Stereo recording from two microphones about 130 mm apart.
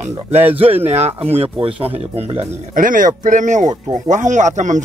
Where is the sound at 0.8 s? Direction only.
55° right (ahead or behind).